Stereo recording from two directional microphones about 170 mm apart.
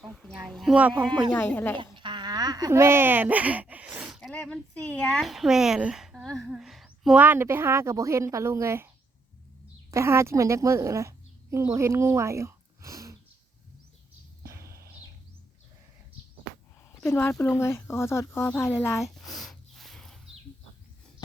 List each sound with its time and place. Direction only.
0.0 s speech: 5° left (ahead or behind)
0.9 s speech: 25° right (ahead or behind)
1.5 s speech: 10° left (ahead or behind)
1.8 s a woman's voice: 30° right (ahead or behind)
9.9 s a woman's voice: 15° right (ahead or behind)
14.4 s a sound: 15° right (ahead or behind)
17.0 s speech: 10° left (ahead or behind)
18.9 s a sound: centre (ahead or behind)